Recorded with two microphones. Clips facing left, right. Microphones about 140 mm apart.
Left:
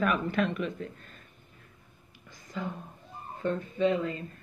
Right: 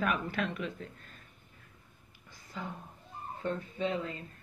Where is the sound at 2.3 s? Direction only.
45° left (ahead or behind).